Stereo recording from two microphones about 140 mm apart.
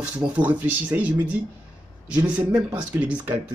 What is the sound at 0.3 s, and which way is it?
Speech, 10° right (ahead or behind).